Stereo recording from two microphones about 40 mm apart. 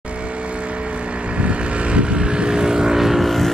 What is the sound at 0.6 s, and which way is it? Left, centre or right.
Vehicle, right.